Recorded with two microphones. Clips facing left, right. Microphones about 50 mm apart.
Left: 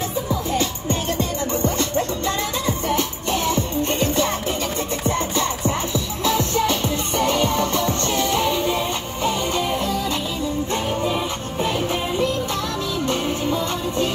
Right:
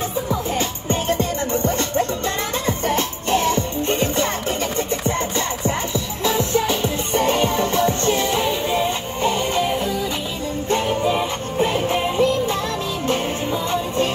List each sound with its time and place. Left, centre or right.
0.3 s music: right
3.8 s music: right
4.1 s music: right
9.6 s music: centre
13.7 s music: right